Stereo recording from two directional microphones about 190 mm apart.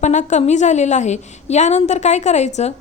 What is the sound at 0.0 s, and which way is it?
A woman's voice, 40° left (ahead or behind).